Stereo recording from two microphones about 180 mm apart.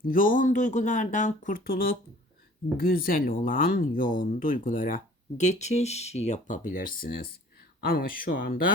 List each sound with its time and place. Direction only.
0.0 s speech: 50° left (ahead or behind)